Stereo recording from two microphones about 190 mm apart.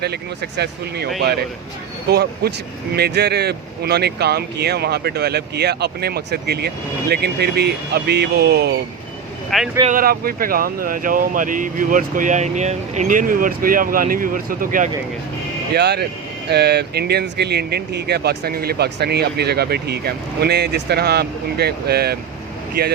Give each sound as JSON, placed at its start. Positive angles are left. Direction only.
{"t": 0.0, "sound": "speech", "side_deg": -60}
{"t": 9.8, "sound": "speech", "side_deg": -45}
{"t": 15.7, "sound": "speech", "side_deg": -60}